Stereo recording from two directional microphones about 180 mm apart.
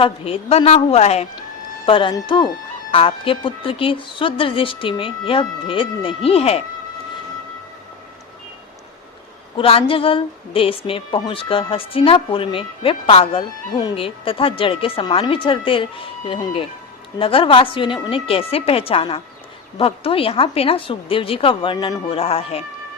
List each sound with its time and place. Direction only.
0.0 s a woman's voice: 35° left (ahead or behind)
9.6 s a woman's voice: 30° left (ahead or behind)